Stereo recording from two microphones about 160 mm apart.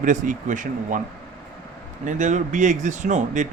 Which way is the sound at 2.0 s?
50° right (ahead or behind).